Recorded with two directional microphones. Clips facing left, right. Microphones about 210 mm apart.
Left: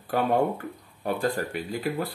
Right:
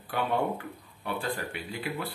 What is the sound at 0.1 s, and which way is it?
Speech, 40° left (ahead or behind).